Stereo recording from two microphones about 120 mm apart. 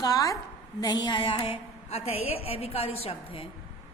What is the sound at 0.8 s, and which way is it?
A woman's voice, 35° left (ahead or behind).